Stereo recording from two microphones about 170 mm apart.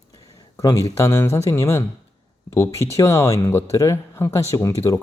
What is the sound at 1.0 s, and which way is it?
Speech, 15° left (ahead or behind).